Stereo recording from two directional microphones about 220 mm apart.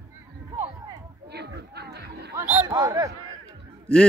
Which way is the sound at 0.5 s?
15° right (ahead or behind).